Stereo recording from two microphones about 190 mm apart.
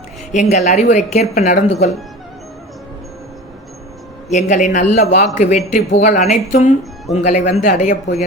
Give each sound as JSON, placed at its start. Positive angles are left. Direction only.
{"t": 0.3, "sound": "a man's voice", "side_deg": 40}
{"t": 4.3, "sound": "a man's voice", "side_deg": 40}